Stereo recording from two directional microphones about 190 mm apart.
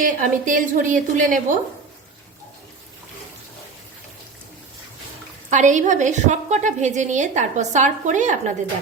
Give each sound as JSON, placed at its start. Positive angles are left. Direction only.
{"t": 0.0, "sound": "a woman's voice", "side_deg": -45}
{"t": 5.5, "sound": "a woman's voice", "side_deg": -40}